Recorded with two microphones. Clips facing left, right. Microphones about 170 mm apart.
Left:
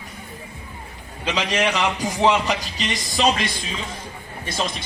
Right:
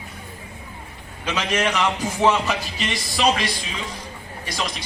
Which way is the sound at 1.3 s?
15° left (ahead or behind).